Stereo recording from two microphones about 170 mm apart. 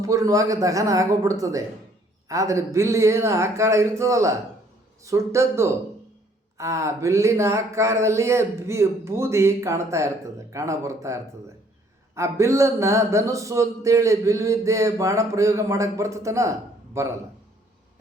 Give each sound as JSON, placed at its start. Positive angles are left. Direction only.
{"t": 0.0, "sound": "speech", "side_deg": -20}